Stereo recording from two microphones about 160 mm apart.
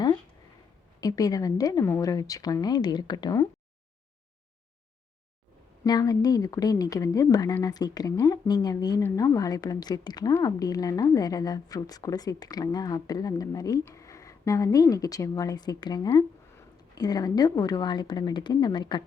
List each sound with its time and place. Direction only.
1.0 s a woman's voice: 20° left (ahead or behind)
5.8 s a woman's voice: 25° left (ahead or behind)